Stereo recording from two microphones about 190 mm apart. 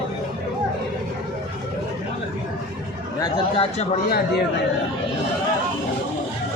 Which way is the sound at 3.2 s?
30° left (ahead or behind).